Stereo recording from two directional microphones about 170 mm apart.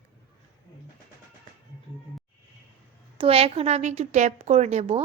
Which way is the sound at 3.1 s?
35° right (ahead or behind).